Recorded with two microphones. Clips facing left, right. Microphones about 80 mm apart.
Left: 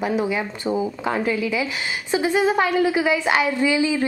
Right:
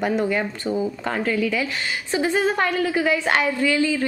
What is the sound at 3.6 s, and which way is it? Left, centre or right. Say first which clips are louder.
Speech: left 1 dB; centre.